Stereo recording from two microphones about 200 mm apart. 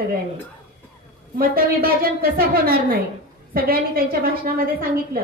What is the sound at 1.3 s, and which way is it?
A woman's voice, 50° right (ahead or behind).